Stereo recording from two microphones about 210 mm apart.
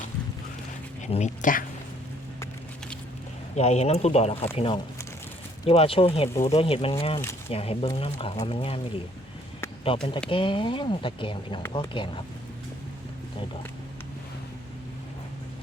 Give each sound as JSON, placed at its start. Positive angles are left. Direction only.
{"t": 1.0, "sound": "speech", "side_deg": 35}
{"t": 3.5, "sound": "speech", "side_deg": 30}
{"t": 9.8, "sound": "speech", "side_deg": 25}